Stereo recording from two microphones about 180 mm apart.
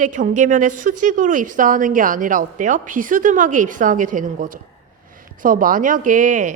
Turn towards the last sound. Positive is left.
turn(degrees=-45)  # may be behind; listen again after turning